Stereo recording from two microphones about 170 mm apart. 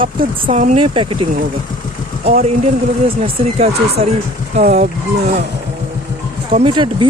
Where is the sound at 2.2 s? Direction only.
45° right (ahead or behind).